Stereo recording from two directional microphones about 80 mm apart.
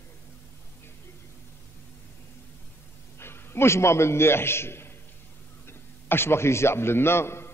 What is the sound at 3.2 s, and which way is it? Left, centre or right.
A man's voice, left.